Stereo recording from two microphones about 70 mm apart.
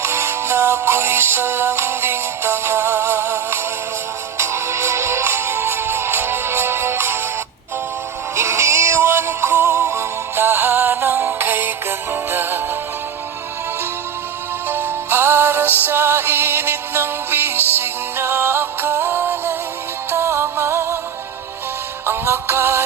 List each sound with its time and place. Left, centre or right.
0.0 s music: right
8.4 s synthetic singing: right
9.7 s music: right
14.7 s music: right
22.0 s music: right